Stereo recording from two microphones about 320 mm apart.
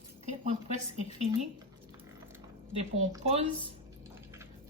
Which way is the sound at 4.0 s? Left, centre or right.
Centre.